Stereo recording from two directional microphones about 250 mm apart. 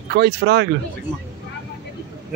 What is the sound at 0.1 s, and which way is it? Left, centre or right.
Speech, right.